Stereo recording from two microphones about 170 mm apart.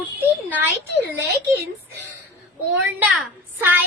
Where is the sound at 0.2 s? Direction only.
10° right (ahead or behind).